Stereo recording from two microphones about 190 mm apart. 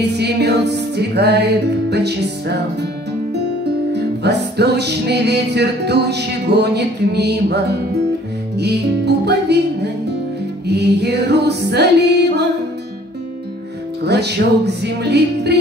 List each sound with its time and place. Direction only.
0.0 s music: 60° right (ahead or behind)
3.9 s music: 60° right (ahead or behind)
14.0 s music: 60° right (ahead or behind)